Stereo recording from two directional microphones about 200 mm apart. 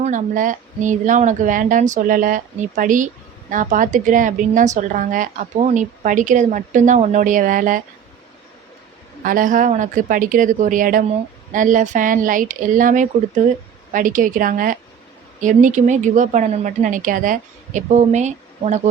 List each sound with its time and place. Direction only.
0.0 s a woman's voice: 40° right (ahead or behind)
9.2 s a woman's voice: 40° right (ahead or behind)